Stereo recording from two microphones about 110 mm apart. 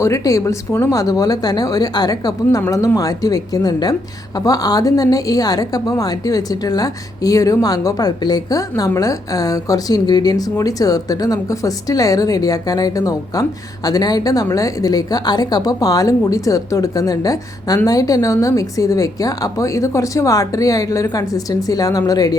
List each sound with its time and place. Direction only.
0.0 s a woman's voice: 30° left (ahead or behind)